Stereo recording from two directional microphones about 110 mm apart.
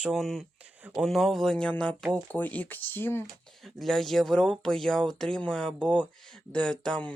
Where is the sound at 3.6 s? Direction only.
Centre (ahead or behind).